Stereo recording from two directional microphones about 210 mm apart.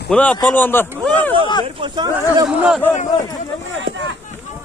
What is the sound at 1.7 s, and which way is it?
Speech, 20° right (ahead or behind).